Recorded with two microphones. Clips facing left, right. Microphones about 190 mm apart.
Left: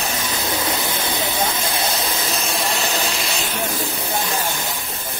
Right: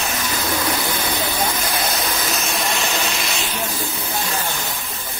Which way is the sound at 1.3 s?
25° left (ahead or behind).